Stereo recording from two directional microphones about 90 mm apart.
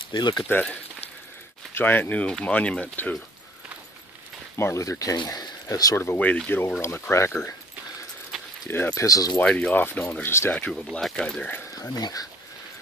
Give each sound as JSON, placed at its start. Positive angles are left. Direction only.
{"t": 0.1, "sound": "speech", "side_deg": 55}
{"t": 0.5, "sound": "speech", "side_deg": 20}
{"t": 4.6, "sound": "speech", "side_deg": 30}
{"t": 5.1, "sound": "speech", "side_deg": 50}
{"t": 6.1, "sound": "speech", "side_deg": 15}
{"t": 6.8, "sound": "speech", "side_deg": 25}
{"t": 8.3, "sound": "keys jangling", "side_deg": 0}
{"t": 8.6, "sound": "speech", "side_deg": 25}
{"t": 8.9, "sound": "speech", "side_deg": 40}
{"t": 9.4, "sound": "speech", "side_deg": 15}
{"t": 10.5, "sound": "speech", "side_deg": 10}
{"t": 11.9, "sound": "speech", "side_deg": 45}